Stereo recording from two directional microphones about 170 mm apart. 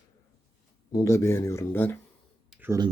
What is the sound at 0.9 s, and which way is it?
Speech, 15° left (ahead or behind).